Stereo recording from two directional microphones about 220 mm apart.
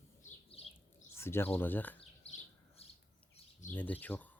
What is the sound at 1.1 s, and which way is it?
Speech, 10° left (ahead or behind).